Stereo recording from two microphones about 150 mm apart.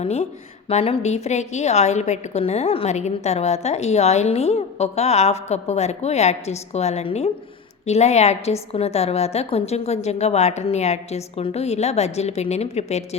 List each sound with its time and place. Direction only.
0.0 s a woman's voice: 45° left (ahead or behind)